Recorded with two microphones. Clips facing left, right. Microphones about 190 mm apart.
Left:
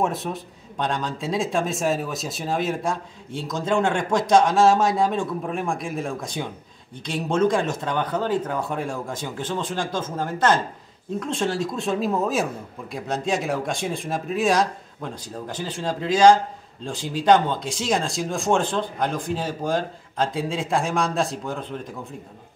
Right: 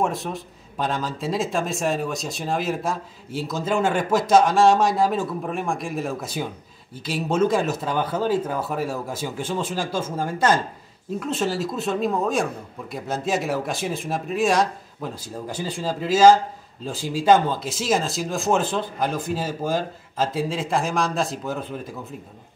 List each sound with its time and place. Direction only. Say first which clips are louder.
0.0 s speech: even; centre (ahead or behind)